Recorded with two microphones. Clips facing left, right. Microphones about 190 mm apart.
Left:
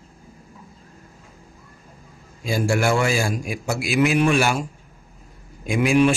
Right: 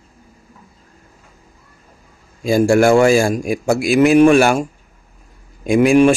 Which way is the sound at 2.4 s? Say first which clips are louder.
Right 9 dB; 45° right (ahead or behind).